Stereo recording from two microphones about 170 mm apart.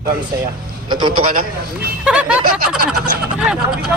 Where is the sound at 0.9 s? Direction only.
25° right (ahead or behind).